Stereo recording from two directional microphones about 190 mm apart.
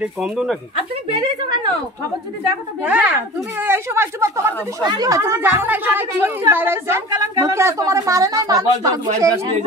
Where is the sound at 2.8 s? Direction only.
5° right (ahead or behind).